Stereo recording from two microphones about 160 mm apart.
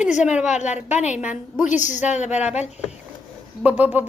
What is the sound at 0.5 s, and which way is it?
Speech, 45° left (ahead or behind).